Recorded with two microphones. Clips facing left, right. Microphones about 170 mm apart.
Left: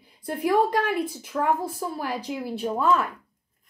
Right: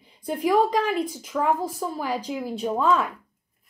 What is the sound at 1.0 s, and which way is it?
Speech, 5° left (ahead or behind).